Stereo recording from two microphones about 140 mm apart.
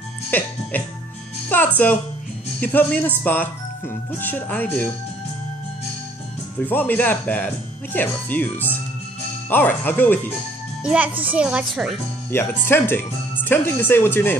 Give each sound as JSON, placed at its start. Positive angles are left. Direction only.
{"t": 0.3, "sound": "speech", "side_deg": 15}
{"t": 1.5, "sound": "music", "side_deg": 10}
{"t": 2.6, "sound": "speech", "side_deg": 10}
{"t": 6.6, "sound": "speech", "side_deg": 15}
{"t": 10.8, "sound": "a child's voice", "side_deg": -10}
{"t": 12.3, "sound": "speech", "side_deg": 15}